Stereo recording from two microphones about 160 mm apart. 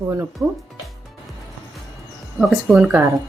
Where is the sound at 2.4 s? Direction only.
Centre (ahead or behind).